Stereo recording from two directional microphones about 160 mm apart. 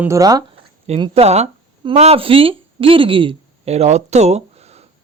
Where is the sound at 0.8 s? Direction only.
40° right (ahead or behind).